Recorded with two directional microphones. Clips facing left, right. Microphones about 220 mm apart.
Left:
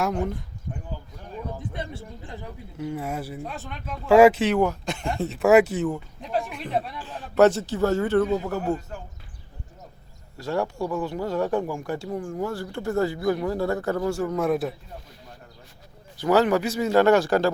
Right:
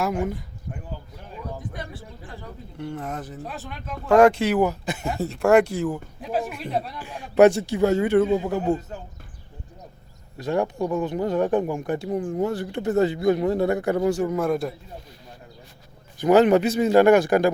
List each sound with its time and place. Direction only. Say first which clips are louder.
0.0 s speech: right 1 dB; 5° right (ahead or behind)
1.7 s speech: left 2 dB; 25° left (ahead or behind)
2.7 s speech: left 2 dB; 5° left (ahead or behind)
3.4 s speech: even; centre (ahead or behind)
7.0 s speech: right 3 dB; 10° right (ahead or behind)
10.3 s speech: right 3 dB; 20° right (ahead or behind)
14.3 s speech: even; centre (ahead or behind)
16.1 s speech: right 4 dB; 15° right (ahead or behind)